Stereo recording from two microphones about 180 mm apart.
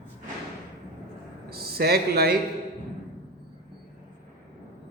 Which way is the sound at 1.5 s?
60° right (ahead or behind).